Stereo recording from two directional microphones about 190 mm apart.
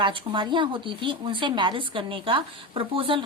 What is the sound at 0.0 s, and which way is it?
Speech, 25° right (ahead or behind).